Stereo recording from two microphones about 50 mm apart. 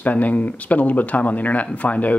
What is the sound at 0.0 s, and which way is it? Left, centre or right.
Speech, left.